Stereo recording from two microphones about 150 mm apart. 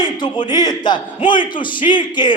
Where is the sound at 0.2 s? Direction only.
30° left (ahead or behind).